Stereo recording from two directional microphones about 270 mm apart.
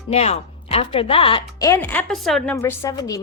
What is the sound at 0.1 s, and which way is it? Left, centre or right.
A woman's voice, left.